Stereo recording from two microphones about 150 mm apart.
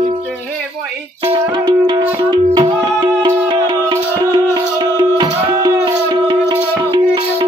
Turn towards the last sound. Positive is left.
turn(degrees=-30)  # may be behind; listen again after turning